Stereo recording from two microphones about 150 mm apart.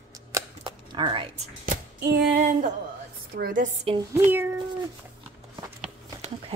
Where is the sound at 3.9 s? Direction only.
35° right (ahead or behind).